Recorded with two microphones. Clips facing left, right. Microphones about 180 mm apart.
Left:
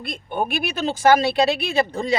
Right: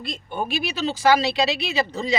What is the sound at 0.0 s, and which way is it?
Speech, 55° left (ahead or behind).